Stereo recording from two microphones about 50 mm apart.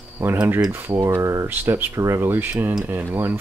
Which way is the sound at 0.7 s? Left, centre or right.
Right.